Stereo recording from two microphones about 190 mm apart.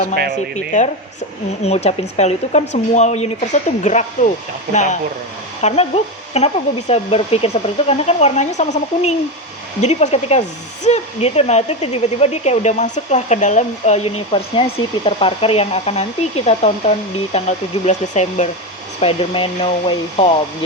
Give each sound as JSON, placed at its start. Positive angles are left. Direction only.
{"t": 0.5, "sound": "speech", "side_deg": 40}